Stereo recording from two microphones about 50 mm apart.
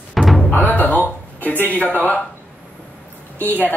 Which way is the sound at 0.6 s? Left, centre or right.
Left.